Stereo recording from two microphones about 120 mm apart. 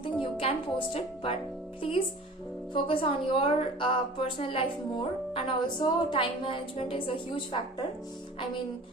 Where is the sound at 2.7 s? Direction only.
45° left (ahead or behind).